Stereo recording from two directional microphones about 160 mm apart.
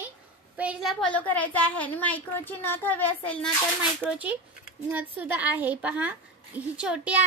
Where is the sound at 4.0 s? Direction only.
10° right (ahead or behind).